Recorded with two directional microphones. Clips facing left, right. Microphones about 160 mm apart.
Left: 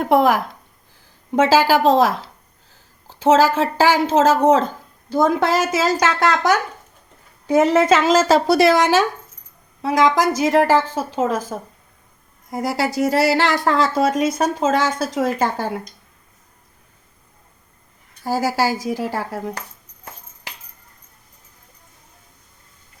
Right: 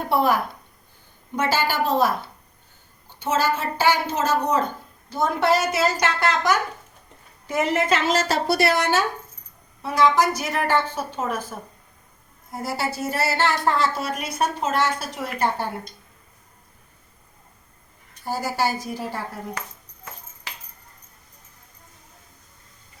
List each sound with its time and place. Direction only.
0.0 s speech: 90° left
1.4 s a woman's voice: 90° left
7.7 s a woman's voice: 90° left
18.2 s a woman's voice: 90° left